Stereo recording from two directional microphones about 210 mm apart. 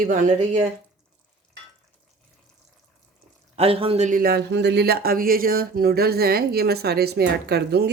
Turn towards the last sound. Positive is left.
turn(degrees=-50)  # may be behind; listen again after turning